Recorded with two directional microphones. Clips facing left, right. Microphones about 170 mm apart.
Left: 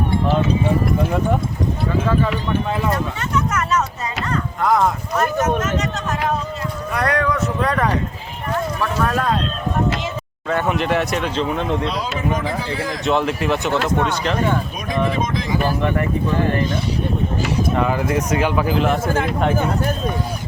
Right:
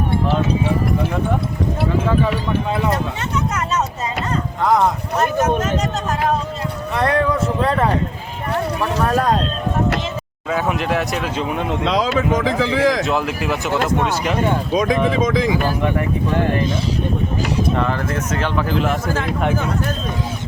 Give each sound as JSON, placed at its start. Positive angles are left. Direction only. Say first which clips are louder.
{"t": 3.3, "sound": "speech", "louder": "left 2 dB", "side_deg": -20}
{"t": 10.5, "sound": "speech", "louder": "left 1 dB", "side_deg": 0}
{"t": 11.3, "sound": "speech", "louder": "left 2 dB", "side_deg": -10}
{"t": 11.9, "sound": "speech", "louder": "right 5 dB", "side_deg": -90}
{"t": 13.1, "sound": "speech", "louder": "left 2 dB", "side_deg": 0}
{"t": 17.7, "sound": "speech", "louder": "left 2 dB", "side_deg": 10}